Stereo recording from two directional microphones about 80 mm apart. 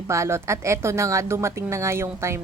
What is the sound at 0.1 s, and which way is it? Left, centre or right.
A woman's voice, right.